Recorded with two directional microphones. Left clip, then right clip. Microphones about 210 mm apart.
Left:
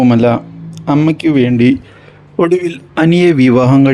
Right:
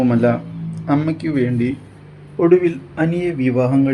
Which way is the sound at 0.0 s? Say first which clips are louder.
Left 6 dB; 30° left (ahead or behind).